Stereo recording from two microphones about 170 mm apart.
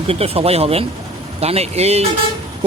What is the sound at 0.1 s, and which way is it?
Speech, 35° right (ahead or behind).